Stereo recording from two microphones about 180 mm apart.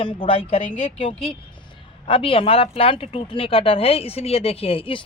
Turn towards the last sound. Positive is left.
turn(degrees=30)  # may be behind; listen again after turning